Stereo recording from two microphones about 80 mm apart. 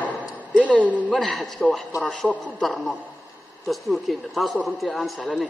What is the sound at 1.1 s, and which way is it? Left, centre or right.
A man's voice, centre.